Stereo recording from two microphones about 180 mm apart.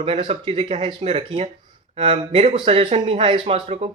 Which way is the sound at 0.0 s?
30° right (ahead or behind).